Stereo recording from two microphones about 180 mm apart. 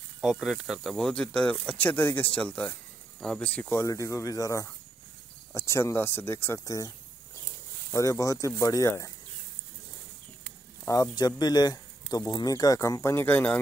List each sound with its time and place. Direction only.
0.2 s speech: centre (ahead or behind); by 6.9 s 20° left (ahead or behind)
7.9 s speech: 15° left (ahead or behind)
10.9 s speech: 20° left (ahead or behind)